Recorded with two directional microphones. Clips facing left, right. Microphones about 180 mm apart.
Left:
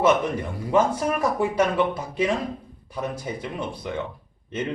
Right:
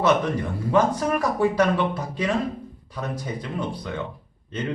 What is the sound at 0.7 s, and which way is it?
Speech, 10° left (ahead or behind).